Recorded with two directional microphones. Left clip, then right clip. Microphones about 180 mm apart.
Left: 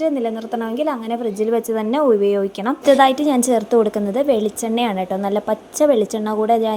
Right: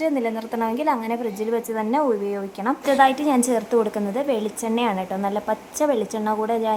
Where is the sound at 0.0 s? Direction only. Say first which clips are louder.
Left 3 dB; 10° left (ahead or behind).